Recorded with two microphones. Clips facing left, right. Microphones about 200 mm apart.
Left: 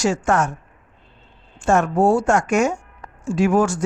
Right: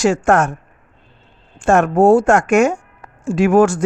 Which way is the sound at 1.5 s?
55° right (ahead or behind).